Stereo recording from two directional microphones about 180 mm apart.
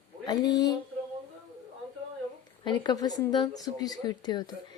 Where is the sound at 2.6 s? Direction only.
25° left (ahead or behind).